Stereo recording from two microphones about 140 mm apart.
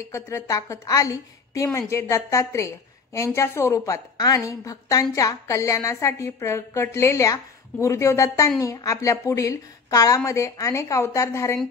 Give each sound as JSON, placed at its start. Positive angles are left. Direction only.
{"t": 0.1, "sound": "a woman's voice", "side_deg": 20}